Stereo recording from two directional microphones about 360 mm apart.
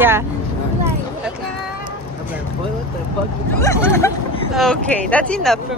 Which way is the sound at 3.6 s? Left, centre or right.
Centre.